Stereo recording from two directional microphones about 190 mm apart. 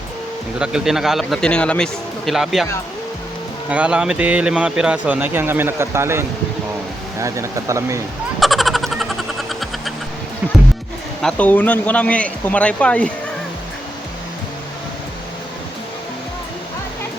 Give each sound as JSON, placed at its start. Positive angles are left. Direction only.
{"t": 0.6, "sound": "a man's voice", "side_deg": -5}
{"t": 3.7, "sound": "speech", "side_deg": -5}
{"t": 8.4, "sound": "vehicle", "side_deg": 0}
{"t": 11.2, "sound": "a man's voice", "side_deg": 5}